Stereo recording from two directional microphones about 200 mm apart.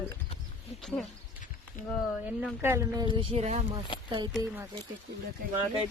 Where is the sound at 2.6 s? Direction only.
15° right (ahead or behind); by 3.6 s 35° right (ahead or behind).